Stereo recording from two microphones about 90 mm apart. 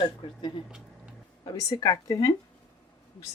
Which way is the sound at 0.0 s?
70° left (ahead or behind).